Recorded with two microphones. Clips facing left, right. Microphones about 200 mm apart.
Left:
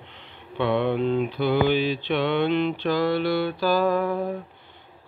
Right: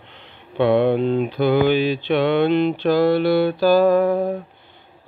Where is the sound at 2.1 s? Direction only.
75° right (ahead or behind).